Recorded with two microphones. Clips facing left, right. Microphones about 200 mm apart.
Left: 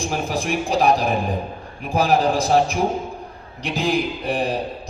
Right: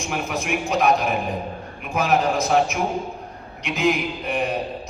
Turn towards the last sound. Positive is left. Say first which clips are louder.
# left 2 dB
turn(degrees=35)  # may be behind; listen again after turning